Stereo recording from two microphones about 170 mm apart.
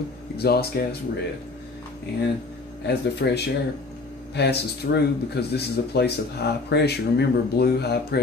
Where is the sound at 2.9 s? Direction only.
80° left.